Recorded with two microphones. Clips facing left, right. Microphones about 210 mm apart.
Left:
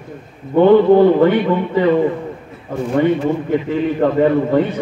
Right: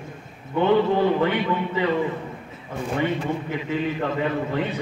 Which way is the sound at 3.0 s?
50° left (ahead or behind).